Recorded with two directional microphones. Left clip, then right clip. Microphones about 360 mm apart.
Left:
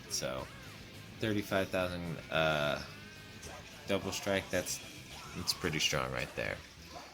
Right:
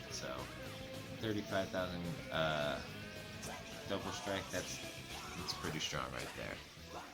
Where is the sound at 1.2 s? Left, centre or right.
Left.